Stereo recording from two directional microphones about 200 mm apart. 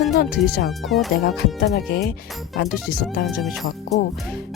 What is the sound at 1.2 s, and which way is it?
Speech, 55° left (ahead or behind).